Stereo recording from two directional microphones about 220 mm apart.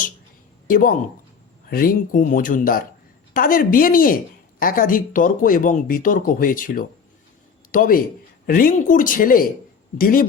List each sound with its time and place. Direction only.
0.7 s speech: 40° left (ahead or behind)